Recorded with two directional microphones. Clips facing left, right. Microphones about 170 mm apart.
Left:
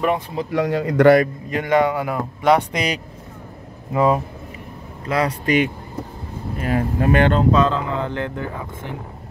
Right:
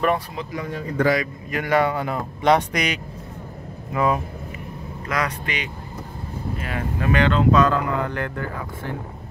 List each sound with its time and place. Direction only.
0.5 s speech: 85° left; by 1.3 s 60° left (ahead or behind)
1.5 s speech: 20° left (ahead or behind)
2.7 s speech: 30° left (ahead or behind)
6.6 s speech: 40° left (ahead or behind)
7.5 s speech: 25° left (ahead or behind)